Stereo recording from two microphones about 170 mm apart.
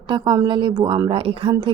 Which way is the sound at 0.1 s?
25° right (ahead or behind).